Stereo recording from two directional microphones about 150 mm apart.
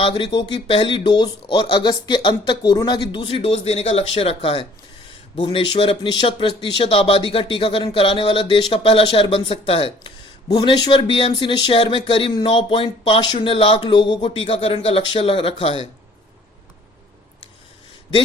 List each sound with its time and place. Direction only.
0.0 s speech: 30° left (ahead or behind)